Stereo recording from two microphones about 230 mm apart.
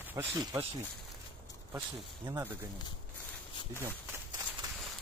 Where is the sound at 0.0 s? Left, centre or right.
Centre.